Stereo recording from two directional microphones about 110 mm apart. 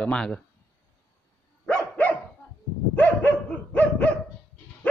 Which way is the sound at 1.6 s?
10° left (ahead or behind).